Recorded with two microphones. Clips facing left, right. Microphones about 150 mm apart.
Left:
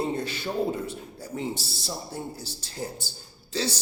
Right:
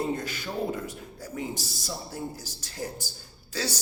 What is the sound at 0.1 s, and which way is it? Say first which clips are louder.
A man's voice: left 2 dB; 30° left (ahead or behind).